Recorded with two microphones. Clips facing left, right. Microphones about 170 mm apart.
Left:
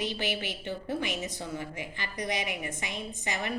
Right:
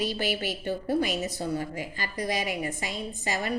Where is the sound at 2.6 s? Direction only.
35° right (ahead or behind).